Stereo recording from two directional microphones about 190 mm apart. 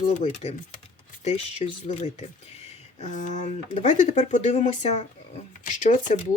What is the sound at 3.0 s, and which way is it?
Speech, 40° left (ahead or behind).